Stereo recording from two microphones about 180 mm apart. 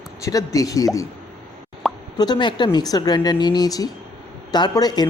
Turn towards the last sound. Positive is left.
turn(degrees=20)  # may be behind; listen again after turning